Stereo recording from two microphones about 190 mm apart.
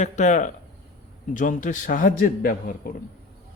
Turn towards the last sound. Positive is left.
turn(degrees=50)  # may be behind; listen again after turning